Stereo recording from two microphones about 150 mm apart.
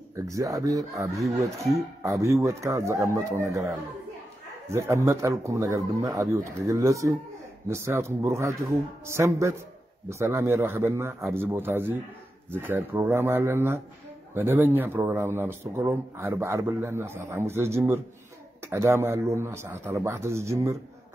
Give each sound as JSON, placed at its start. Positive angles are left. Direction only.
{"t": 0.1, "sound": "a man's voice", "side_deg": -20}